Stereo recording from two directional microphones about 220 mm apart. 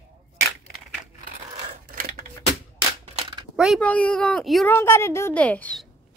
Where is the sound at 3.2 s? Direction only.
20° right (ahead or behind).